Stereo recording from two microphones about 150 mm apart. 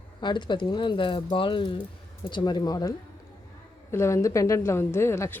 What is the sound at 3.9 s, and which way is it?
Speech, 20° left (ahead or behind).